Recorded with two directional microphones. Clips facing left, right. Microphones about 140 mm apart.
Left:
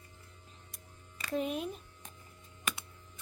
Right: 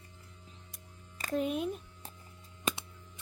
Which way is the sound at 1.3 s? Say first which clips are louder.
Right 2 dB; centre (ahead or behind).